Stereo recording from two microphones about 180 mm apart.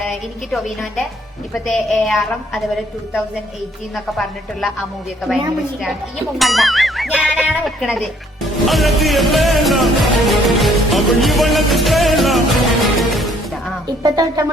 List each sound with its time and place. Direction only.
0.5 s speech: centre (ahead or behind)
3.9 s speech: 5° left (ahead or behind)
6.4 s speech: centre (ahead or behind)
12.8 s music: centre (ahead or behind)
13.8 s speech: 20° right (ahead or behind)